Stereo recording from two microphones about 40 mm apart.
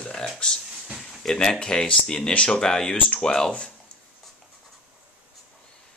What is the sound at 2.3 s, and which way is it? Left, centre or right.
Speech, left.